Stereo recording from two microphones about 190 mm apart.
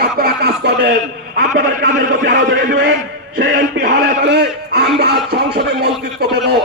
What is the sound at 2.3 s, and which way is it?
A man's voice, 60° right (ahead or behind).